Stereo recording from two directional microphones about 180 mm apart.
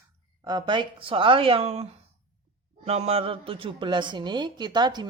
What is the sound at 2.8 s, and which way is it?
A woman's voice, 35° right (ahead or behind).